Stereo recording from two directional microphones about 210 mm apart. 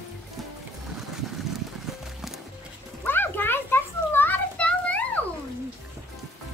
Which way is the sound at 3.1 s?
10° left (ahead or behind).